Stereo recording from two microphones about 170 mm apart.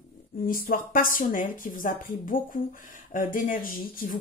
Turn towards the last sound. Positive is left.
turn(degrees=55)  # may be behind; listen again after turning